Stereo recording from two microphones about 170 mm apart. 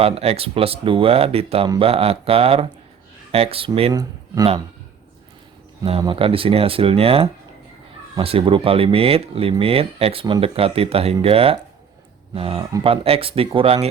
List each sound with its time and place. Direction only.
0.0 s speech: 35° right (ahead or behind)
5.8 s speech: 30° right (ahead or behind)